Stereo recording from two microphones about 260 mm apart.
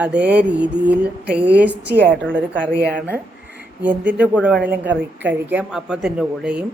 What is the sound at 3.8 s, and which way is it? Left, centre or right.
A woman's voice, centre.